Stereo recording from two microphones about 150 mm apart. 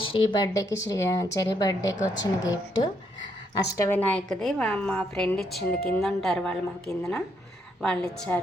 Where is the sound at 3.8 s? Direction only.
10° left (ahead or behind).